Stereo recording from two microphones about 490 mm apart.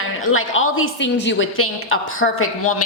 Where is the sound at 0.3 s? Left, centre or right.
Left.